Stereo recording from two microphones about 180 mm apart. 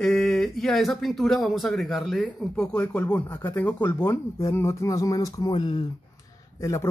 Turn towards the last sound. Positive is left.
turn(degrees=15)  # may be behind; listen again after turning